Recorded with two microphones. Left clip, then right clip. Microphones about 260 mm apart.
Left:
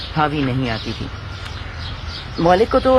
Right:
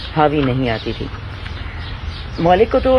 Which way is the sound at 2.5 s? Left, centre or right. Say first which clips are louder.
Right 1 dB; left.